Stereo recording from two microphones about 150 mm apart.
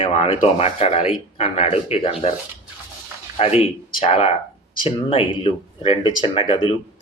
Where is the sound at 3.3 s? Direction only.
40° left (ahead or behind).